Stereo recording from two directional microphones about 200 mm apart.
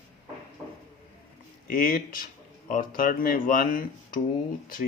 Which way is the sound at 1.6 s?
45° left (ahead or behind).